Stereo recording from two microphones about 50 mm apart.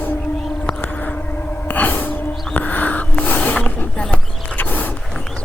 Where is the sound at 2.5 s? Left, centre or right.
Left.